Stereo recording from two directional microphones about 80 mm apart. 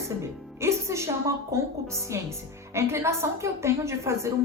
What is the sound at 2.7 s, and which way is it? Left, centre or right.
A woman's voice, right.